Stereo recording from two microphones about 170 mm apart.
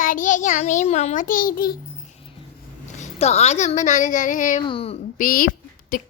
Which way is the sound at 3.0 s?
40° left (ahead or behind).